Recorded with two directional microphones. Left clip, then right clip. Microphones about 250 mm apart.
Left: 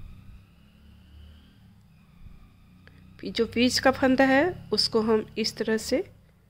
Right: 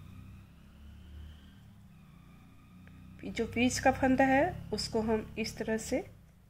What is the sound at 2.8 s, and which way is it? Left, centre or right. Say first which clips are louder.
A woman's voice: left 7 dB; left.